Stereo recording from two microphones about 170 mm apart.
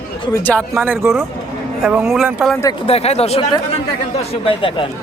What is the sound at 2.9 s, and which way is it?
Speech, 40° left (ahead or behind).